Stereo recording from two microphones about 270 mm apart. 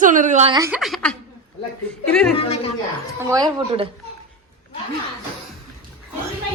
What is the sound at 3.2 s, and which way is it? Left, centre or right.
Speech, centre.